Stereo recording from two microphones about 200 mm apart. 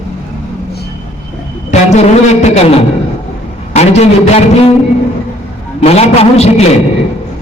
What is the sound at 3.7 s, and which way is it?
Speech, 35° left (ahead or behind).